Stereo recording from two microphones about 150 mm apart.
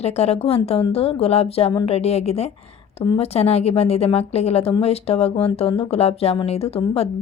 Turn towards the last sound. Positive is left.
turn(degrees=40)  # may be behind; listen again after turning